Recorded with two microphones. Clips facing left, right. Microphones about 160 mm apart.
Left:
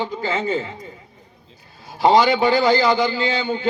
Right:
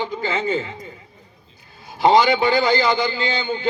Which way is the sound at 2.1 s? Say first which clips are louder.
Even; 35° left (ahead or behind).